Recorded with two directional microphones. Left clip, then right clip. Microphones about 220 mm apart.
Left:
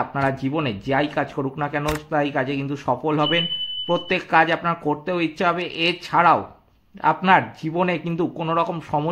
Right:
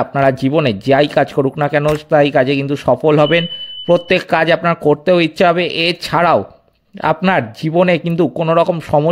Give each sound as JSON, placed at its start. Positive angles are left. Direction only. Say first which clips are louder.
{"t": 0.0, "sound": "speech", "louder": "right 9 dB", "side_deg": -40}